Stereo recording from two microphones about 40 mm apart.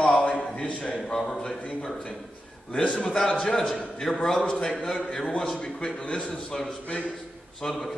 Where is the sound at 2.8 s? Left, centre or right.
Left.